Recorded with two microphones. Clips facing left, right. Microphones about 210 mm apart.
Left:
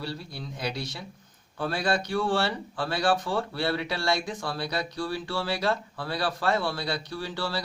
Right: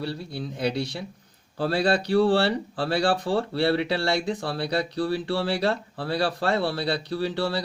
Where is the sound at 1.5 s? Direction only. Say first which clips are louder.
Right 5 dB; 35° right (ahead or behind).